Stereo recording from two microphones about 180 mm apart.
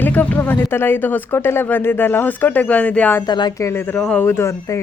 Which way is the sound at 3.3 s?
25° left (ahead or behind).